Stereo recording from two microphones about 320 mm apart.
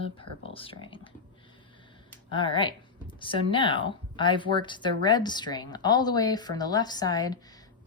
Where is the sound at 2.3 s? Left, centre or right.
Centre.